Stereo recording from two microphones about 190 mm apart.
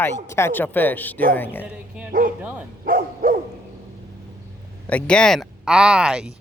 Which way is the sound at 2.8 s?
50° right (ahead or behind).